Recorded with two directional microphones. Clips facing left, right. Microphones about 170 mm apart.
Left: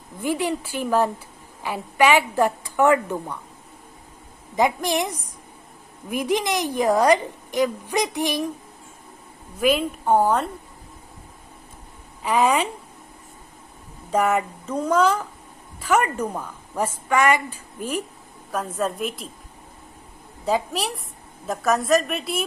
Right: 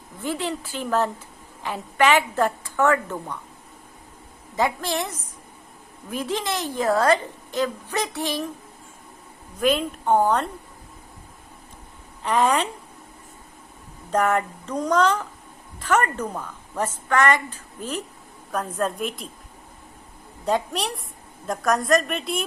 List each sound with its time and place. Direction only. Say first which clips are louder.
0.2 s a woman's voice: left 4 dB; 10° left (ahead or behind)
4.5 s a woman's voice: left 3 dB; 15° left (ahead or behind)
9.6 s a woman's voice: left 1 dB; 5° left (ahead or behind)
12.2 s a woman's voice: left 1 dB; 10° left (ahead or behind)
14.1 s a woman's voice: left 1 dB; 10° left (ahead or behind)
20.4 s a woman's voice: left 1 dB; 5° left (ahead or behind)